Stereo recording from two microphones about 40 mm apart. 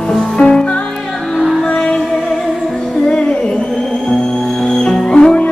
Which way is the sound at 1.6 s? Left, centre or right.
Centre.